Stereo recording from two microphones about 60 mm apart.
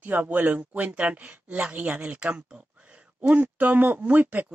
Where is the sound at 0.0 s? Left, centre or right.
Right.